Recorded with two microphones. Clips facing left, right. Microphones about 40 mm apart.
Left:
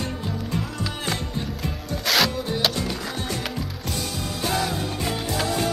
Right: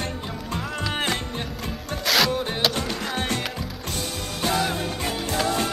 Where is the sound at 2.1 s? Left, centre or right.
Centre.